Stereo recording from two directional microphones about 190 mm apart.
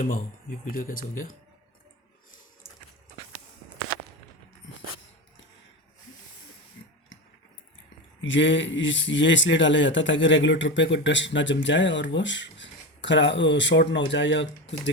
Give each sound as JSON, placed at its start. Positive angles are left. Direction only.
{"t": 0.0, "sound": "speech", "side_deg": 45}
{"t": 8.2, "sound": "speech", "side_deg": 75}